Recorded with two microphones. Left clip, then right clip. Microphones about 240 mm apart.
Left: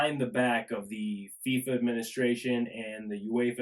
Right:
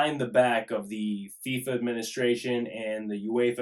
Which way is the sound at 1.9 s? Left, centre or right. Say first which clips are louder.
Right 3 dB; centre.